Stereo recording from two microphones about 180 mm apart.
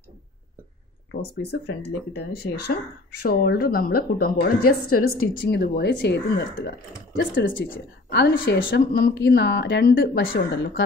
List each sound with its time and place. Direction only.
1.2 s speech: 65° left (ahead or behind)
7.2 s speech: 85° left
7.7 s a woman's voice: 70° left (ahead or behind)